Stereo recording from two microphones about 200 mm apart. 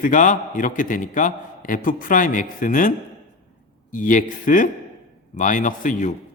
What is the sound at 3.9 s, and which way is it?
A man's voice, 40° left (ahead or behind).